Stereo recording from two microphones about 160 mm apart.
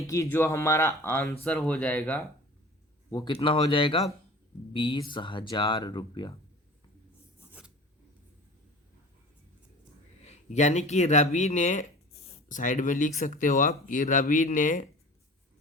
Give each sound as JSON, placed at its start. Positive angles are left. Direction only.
{"t": 0.1, "sound": "speech", "side_deg": 15}
{"t": 3.1, "sound": "speech", "side_deg": 20}
{"t": 3.4, "sound": "speech", "side_deg": 30}
{"t": 10.2, "sound": "speech", "side_deg": 45}